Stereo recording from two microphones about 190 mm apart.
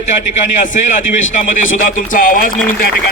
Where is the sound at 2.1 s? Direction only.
45° left (ahead or behind).